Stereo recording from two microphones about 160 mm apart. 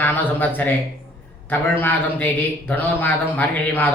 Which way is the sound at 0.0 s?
10° left (ahead or behind).